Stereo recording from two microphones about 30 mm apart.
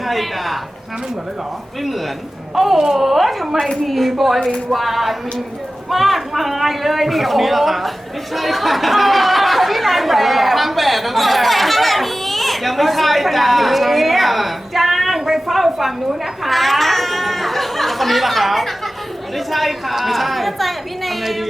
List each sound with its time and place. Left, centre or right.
0.0 s speech: centre
2.7 s speech: centre
3.0 s speech: centre
15.2 s a sound: centre
16.4 s laughter: centre
19.5 s speech: centre